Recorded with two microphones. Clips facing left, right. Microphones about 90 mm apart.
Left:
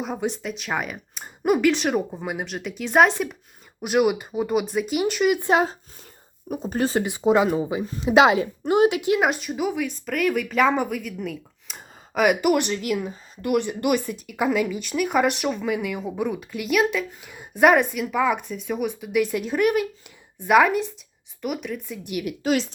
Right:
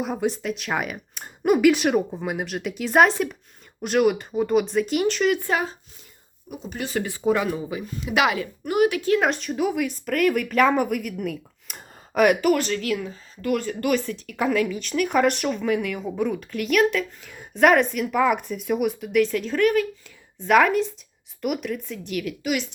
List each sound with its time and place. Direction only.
0.0 s speech: centre (ahead or behind)
5.4 s speech: 20° left (ahead or behind)
6.5 s speech: 40° left (ahead or behind)
7.0 s speech: 20° left (ahead or behind); by 12.4 s centre (ahead or behind)
12.4 s speech: 15° left (ahead or behind)
22.4 s speech: 35° left (ahead or behind)